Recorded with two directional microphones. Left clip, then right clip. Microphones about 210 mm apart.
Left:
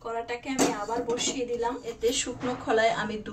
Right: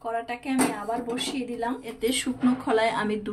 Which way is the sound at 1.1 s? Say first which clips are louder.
Left 2 dB; 50° right (ahead or behind).